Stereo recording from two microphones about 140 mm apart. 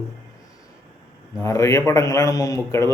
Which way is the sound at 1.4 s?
20° left (ahead or behind).